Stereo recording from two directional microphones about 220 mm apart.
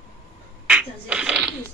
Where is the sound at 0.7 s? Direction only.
5° right (ahead or behind).